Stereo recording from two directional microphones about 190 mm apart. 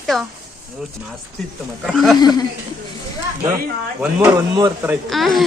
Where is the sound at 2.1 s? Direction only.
20° left (ahead or behind).